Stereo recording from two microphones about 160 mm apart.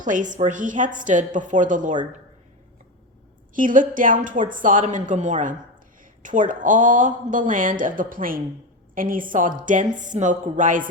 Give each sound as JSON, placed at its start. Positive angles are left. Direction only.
{"t": 0.0, "sound": "a woman's voice", "side_deg": -55}
{"t": 3.5, "sound": "speech", "side_deg": -55}